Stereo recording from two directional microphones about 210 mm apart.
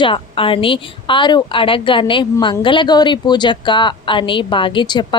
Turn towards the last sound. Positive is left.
turn(degrees=20)  # may be behind; listen again after turning